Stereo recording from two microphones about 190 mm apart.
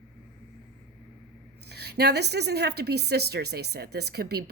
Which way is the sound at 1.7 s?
60° right (ahead or behind).